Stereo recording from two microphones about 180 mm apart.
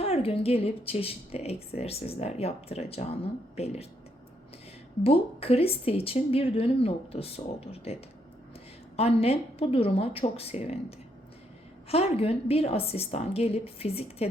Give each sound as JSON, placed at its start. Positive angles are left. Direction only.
{"t": 0.0, "sound": "a woman's voice", "side_deg": 35}
{"t": 5.0, "sound": "a woman's voice", "side_deg": 30}
{"t": 9.0, "sound": "a woman's voice", "side_deg": 35}